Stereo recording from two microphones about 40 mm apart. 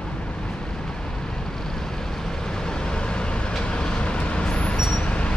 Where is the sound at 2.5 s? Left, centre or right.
Centre.